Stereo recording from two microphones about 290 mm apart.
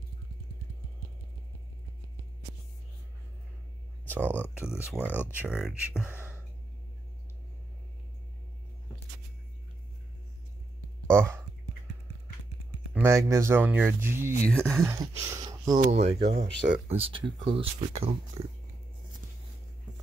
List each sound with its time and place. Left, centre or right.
4.0 s speech: centre
5.2 s speech: centre
11.1 s a sound: centre
12.9 s speech: centre
14.4 s speech: centre
14.8 s speech: centre
16.2 s speech: right
16.9 s speech: centre